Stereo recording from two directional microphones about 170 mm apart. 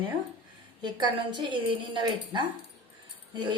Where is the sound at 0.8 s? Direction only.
25° right (ahead or behind).